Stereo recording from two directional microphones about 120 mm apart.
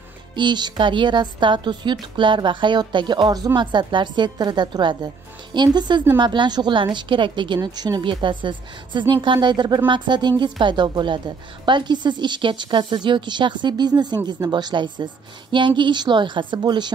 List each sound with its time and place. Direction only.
0.4 s a woman's voice: 40° right (ahead or behind)